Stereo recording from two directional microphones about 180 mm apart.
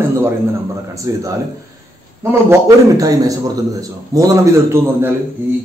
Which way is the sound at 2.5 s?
20° right (ahead or behind).